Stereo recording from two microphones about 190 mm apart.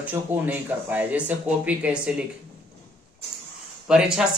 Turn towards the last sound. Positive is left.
turn(degrees=-5)  # may be behind; listen again after turning